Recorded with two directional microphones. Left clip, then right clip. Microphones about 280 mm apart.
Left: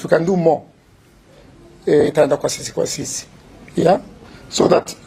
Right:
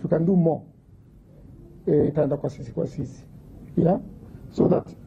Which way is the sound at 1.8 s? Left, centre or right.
Centre.